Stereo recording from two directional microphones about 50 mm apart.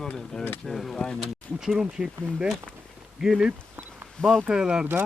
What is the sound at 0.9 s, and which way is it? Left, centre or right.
Speech, centre.